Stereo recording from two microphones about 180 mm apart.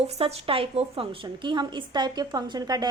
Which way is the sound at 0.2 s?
30° right (ahead or behind).